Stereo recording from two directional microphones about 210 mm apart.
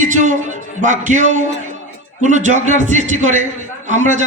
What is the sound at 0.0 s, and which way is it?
A man's voice, 35° right (ahead or behind).